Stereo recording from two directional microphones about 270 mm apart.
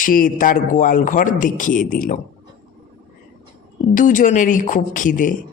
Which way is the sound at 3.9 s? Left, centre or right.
Left.